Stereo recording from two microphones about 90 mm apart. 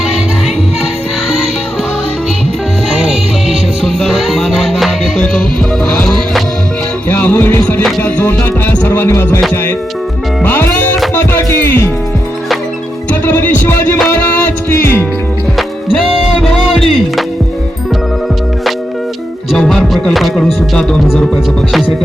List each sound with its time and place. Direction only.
2.9 s music: 5° right (ahead or behind)
7.1 s music: 20° left (ahead or behind)
10.4 s music: 20° left (ahead or behind)
13.2 s music: 20° left (ahead or behind)
16.7 s music: 5° left (ahead or behind)
19.5 s music: 5° left (ahead or behind)